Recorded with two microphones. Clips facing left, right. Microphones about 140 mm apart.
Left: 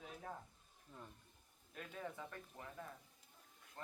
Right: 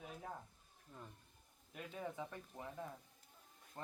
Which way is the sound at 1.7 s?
15° right (ahead or behind).